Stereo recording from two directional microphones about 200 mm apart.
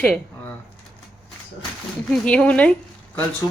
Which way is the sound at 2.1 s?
5° left (ahead or behind).